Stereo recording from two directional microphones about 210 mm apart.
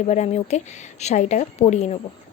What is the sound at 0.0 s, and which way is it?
Speech, 35° left (ahead or behind).